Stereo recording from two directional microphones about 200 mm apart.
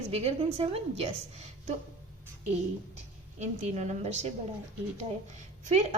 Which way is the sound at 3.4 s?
35° right (ahead or behind).